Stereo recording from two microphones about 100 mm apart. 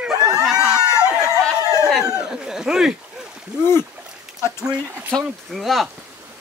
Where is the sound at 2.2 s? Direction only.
5° right (ahead or behind).